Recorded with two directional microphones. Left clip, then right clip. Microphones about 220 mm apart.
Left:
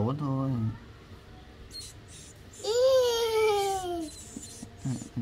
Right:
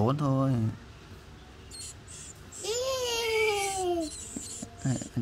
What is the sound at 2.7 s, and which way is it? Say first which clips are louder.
Babbling: left 7 dB; 5° left (ahead or behind).